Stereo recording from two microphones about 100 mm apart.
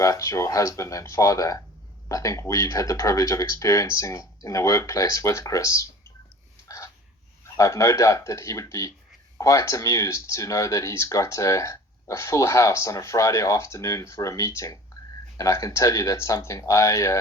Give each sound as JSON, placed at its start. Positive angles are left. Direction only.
{"t": 0.0, "sound": "speech", "side_deg": 30}
{"t": 6.7, "sound": "a sound", "side_deg": 30}
{"t": 7.4, "sound": "speech", "side_deg": 30}